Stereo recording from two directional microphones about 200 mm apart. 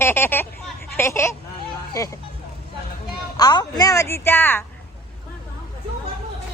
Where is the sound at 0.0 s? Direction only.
10° left (ahead or behind).